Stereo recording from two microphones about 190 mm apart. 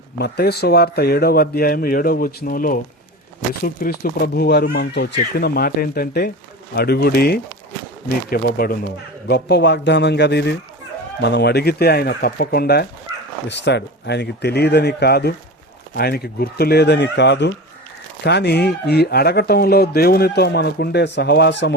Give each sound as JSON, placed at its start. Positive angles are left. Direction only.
{"t": 0.2, "sound": "a man's voice", "side_deg": 60}